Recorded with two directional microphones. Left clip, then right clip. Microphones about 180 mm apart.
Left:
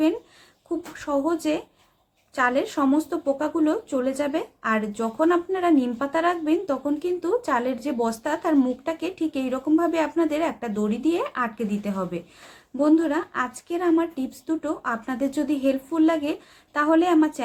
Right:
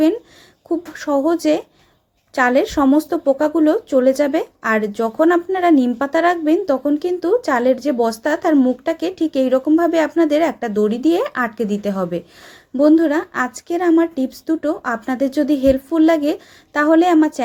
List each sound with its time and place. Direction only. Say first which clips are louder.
0.9 s speech: right 7 dB; 30° right (ahead or behind)